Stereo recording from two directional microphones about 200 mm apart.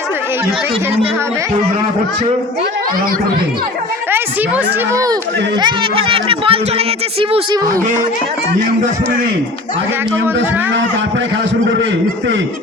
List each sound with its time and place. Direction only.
4.1 s a woman's voice: 15° right (ahead or behind)